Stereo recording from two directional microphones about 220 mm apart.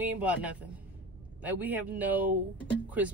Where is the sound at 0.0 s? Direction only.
5° right (ahead or behind).